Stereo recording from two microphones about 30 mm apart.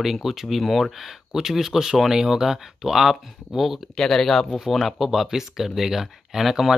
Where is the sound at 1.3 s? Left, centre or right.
Centre.